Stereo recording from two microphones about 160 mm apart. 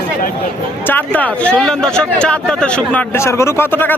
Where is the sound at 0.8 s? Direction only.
10° left (ahead or behind).